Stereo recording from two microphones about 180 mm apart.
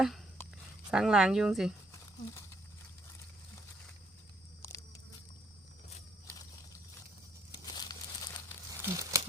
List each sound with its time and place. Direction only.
0.9 s speech: 5° right (ahead or behind)
1.9 s a sound: 15° left (ahead or behind)
7.6 s crumpling: 20° left (ahead or behind)
8.8 s tearing: 15° right (ahead or behind)